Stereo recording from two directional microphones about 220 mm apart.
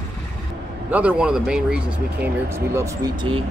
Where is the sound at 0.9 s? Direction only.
5° right (ahead or behind).